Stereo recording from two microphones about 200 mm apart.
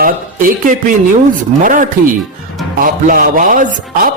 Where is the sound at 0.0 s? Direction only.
40° right (ahead or behind).